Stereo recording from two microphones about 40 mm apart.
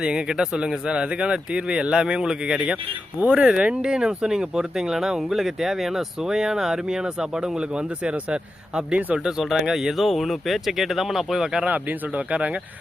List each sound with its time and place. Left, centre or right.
0.0 s speech: right
9.6 s speech: centre
11.7 s speech: right